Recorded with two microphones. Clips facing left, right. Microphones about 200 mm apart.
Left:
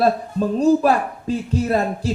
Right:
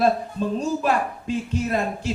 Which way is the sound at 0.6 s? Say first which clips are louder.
Left 9 dB; 35° left (ahead or behind).